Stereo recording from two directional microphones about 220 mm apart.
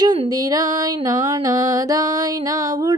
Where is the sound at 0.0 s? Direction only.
20° right (ahead or behind).